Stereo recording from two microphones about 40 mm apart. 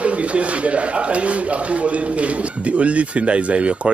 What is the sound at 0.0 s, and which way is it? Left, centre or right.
Speech, right.